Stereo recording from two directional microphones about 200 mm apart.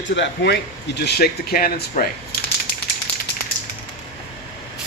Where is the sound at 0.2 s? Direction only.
60° left (ahead or behind).